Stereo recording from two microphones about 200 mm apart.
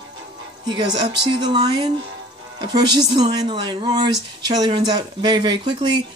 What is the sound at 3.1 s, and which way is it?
Speech, 20° right (ahead or behind).